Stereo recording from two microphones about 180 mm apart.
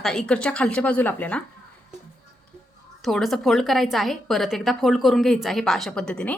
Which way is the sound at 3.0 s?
Centre (ahead or behind).